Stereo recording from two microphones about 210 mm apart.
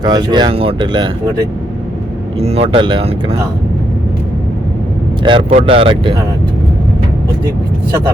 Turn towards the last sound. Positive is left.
turn(degrees=-25)  # may be behind; listen again after turning